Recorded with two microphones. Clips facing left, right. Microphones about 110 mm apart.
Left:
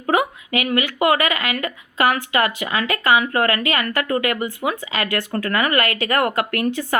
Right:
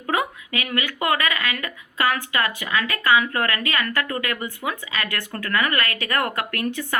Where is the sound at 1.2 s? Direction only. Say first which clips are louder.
Left 4 dB; 25° left (ahead or behind).